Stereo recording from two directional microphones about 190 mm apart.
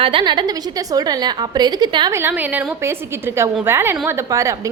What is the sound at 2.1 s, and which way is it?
A woman's voice, 10° right (ahead or behind).